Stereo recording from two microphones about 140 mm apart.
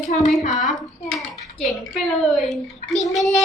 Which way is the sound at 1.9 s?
Centre (ahead or behind).